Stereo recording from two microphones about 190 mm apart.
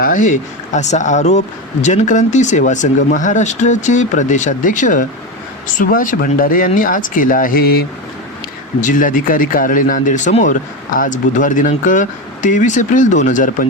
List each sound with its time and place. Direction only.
0.0 s speech: 40° left (ahead or behind)